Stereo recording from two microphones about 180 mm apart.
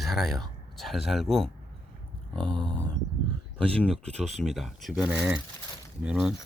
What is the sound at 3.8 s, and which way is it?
Speech, 5° left (ahead or behind).